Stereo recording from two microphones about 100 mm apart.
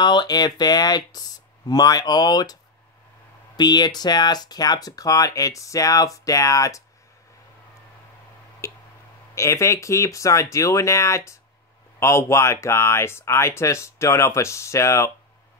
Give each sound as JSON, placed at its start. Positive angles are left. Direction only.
{"t": 0.0, "sound": "speech", "side_deg": 45}
{"t": 9.3, "sound": "speech", "side_deg": 30}